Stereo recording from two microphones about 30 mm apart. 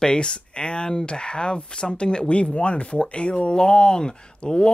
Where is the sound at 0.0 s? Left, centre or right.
Left.